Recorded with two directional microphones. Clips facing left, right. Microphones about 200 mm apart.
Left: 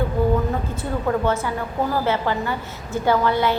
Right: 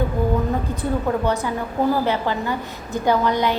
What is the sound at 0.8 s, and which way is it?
A woman's voice, 15° right (ahead or behind).